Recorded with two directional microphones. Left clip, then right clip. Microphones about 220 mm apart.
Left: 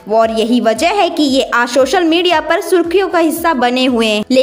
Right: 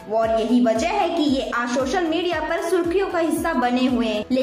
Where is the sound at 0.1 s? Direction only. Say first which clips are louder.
Left 8 dB; 50° left (ahead or behind).